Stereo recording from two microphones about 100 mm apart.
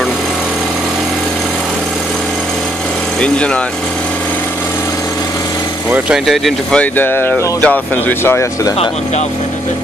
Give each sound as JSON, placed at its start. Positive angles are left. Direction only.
{"t": 3.2, "sound": "speech", "side_deg": 10}
{"t": 6.1, "sound": "speech", "side_deg": 0}
{"t": 6.8, "sound": "speech", "side_deg": 20}